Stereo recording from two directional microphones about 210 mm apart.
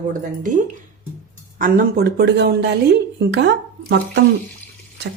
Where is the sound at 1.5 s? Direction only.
40° right (ahead or behind).